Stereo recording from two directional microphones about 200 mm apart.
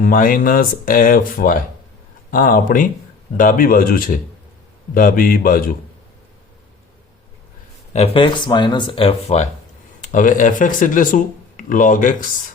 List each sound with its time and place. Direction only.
0.0 s speech: 45° left (ahead or behind)
7.9 s speech: 30° left (ahead or behind)